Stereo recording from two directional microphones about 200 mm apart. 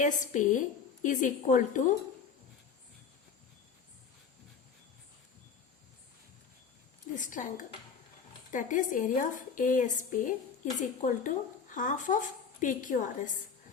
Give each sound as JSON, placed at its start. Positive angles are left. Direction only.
{"t": 0.0, "sound": "a woman's voice", "side_deg": 40}
{"t": 7.2, "sound": "a woman's voice", "side_deg": 40}